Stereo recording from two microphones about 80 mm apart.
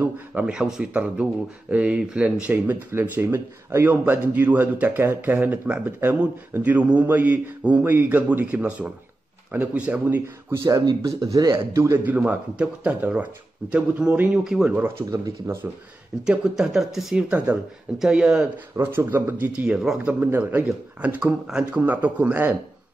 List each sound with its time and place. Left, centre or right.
0.0 s speech: centre
10.5 s a man's voice: right
11.5 s a man's voice: right
12.0 s speech: centre
15.4 s a man's voice: right
16.3 s speech: centre
17.3 s speech: centre
18.8 s speech: right; by 20.1 s centre
20.2 s speech: right